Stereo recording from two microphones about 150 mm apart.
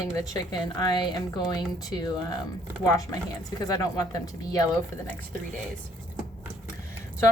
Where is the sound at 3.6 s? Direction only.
25° left (ahead or behind).